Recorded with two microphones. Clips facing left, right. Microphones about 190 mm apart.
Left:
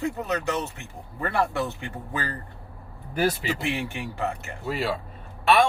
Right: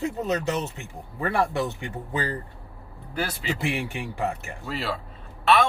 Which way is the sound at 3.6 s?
15° right (ahead or behind).